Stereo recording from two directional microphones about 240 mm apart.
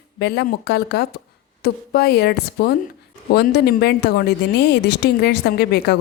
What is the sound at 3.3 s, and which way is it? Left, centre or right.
A woman's voice, left.